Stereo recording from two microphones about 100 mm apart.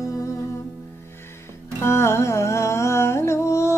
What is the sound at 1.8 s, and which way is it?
Music, 25° left (ahead or behind).